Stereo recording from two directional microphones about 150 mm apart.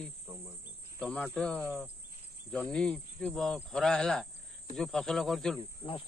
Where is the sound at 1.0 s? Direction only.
10° left (ahead or behind).